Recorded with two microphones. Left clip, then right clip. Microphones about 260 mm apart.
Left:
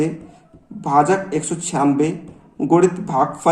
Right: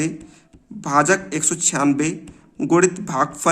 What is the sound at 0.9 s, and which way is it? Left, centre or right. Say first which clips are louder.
A man's voice: left 1 dB; right.